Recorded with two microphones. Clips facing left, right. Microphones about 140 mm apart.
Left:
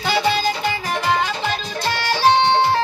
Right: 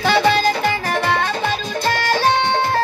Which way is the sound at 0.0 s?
60° right (ahead or behind).